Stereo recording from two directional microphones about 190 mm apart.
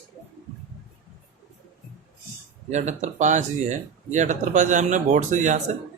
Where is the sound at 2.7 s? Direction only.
40° right (ahead or behind).